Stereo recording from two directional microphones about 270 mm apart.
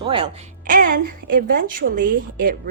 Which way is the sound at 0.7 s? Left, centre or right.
Right.